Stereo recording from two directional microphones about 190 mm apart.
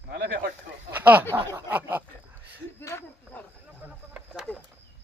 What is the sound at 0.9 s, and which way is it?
Speech, 10° right (ahead or behind).